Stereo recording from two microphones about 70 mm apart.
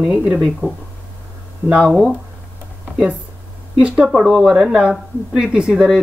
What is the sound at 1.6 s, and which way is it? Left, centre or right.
Speech, centre.